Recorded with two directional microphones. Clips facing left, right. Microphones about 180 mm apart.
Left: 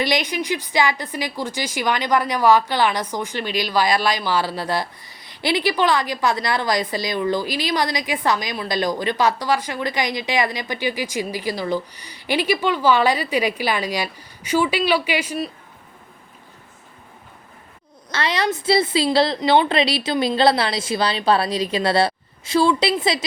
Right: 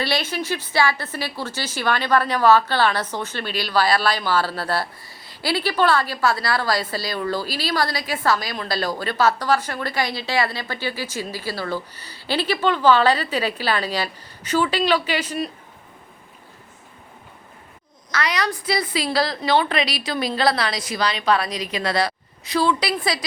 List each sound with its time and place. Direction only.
0.0 s a woman's voice: 15° left (ahead or behind)
18.1 s a woman's voice: 25° left (ahead or behind)